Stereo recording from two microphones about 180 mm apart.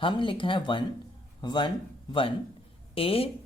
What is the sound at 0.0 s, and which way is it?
Speech, 30° left (ahead or behind).